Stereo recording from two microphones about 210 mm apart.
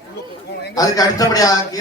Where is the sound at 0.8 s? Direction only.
15° left (ahead or behind).